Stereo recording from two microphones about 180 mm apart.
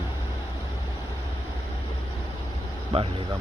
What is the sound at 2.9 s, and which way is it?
Speech, 35° right (ahead or behind).